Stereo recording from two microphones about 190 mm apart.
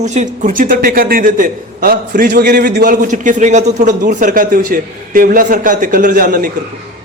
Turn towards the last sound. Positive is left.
turn(degrees=-50)  # may be behind; listen again after turning